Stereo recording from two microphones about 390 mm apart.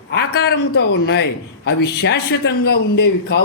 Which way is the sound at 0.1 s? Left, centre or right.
Left.